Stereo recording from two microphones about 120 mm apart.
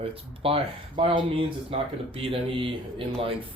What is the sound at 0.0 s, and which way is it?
Speech, 50° right (ahead or behind).